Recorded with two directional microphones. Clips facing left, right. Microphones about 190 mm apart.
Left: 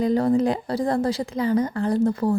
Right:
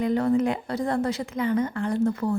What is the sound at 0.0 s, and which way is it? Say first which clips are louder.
A woman's voice: left 3 dB; 35° left (ahead or behind).